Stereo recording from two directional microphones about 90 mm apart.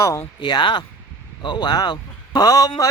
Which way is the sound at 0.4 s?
60° left (ahead or behind).